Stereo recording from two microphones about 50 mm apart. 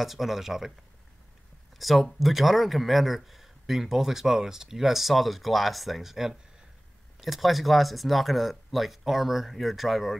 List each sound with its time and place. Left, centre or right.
0.0 s speech: centre
1.8 s speech: centre